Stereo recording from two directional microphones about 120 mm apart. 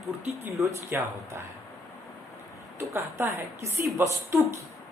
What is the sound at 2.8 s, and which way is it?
A woman's voice, 25° right (ahead or behind).